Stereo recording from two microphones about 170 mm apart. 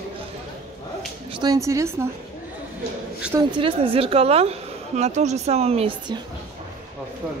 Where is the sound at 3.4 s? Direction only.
30° right (ahead or behind).